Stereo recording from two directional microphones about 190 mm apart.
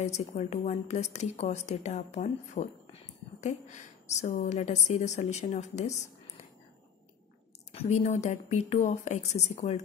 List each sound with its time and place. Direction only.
0.0 s a woman's voice: 35° left (ahead or behind)
7.7 s a woman's voice: 35° left (ahead or behind)